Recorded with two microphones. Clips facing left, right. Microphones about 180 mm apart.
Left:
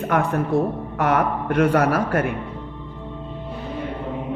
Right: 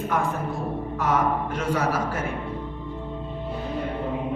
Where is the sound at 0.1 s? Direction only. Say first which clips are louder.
Left 8 dB; 65° left (ahead or behind).